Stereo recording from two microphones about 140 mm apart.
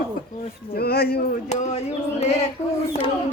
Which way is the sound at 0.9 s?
90° left.